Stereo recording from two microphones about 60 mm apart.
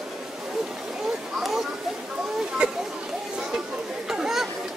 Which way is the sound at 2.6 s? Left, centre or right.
Centre.